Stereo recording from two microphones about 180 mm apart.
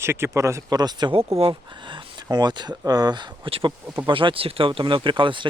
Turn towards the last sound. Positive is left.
turn(degrees=-25)  # may be behind; listen again after turning